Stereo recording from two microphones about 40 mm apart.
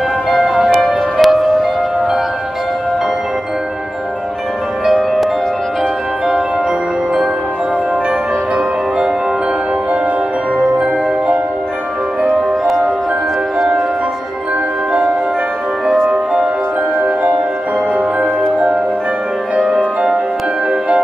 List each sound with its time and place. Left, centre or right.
0.4 s music: centre
13.6 s music: centre